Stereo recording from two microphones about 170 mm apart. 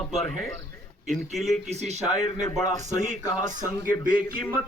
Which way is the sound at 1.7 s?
40° right (ahead or behind).